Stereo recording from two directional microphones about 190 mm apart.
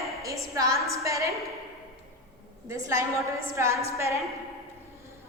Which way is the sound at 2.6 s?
15° right (ahead or behind).